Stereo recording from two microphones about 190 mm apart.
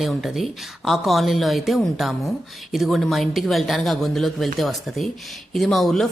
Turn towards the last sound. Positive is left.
turn(degrees=0)  # may be behind; listen again after turning